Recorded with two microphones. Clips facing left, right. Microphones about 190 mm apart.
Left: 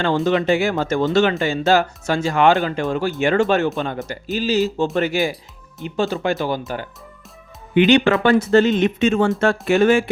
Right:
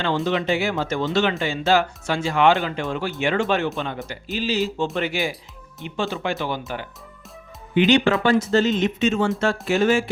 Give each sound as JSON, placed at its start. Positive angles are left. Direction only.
{"t": 0.3, "sound": "speech", "side_deg": 45}
{"t": 7.8, "sound": "speech", "side_deg": 60}